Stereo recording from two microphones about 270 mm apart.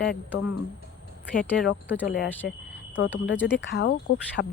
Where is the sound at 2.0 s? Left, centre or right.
Left.